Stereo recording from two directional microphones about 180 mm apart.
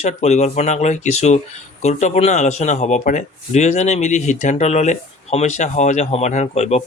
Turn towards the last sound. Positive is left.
turn(degrees=35)  # may be behind; listen again after turning